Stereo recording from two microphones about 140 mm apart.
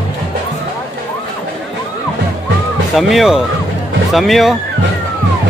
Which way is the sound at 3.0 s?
Centre (ahead or behind).